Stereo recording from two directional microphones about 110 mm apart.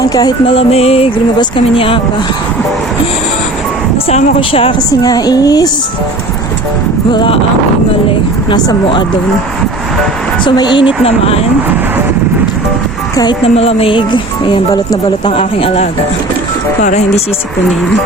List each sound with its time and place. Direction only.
0.0 s a woman's voice: 35° left (ahead or behind)
0.4 s speech: 65° left (ahead or behind)
1.4 s speech: 50° left (ahead or behind)
4.4 s speech: 55° left (ahead or behind)
4.9 s a woman's voice: 35° left (ahead or behind)
7.1 s speech: 45° left (ahead or behind)
8.4 s speech: 45° left (ahead or behind)
10.4 s speech: 40° left (ahead or behind)
13.4 s speech: 65° left (ahead or behind); by 14.6 s 50° left (ahead or behind)
15.3 s speech: 60° left (ahead or behind)